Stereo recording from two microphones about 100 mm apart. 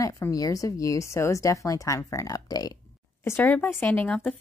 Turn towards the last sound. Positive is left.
turn(degrees=15)  # may be behind; listen again after turning